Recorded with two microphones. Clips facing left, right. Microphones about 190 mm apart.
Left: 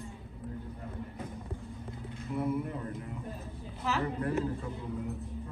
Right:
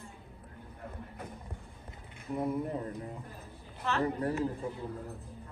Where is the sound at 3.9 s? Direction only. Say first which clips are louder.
Even; 5° left (ahead or behind).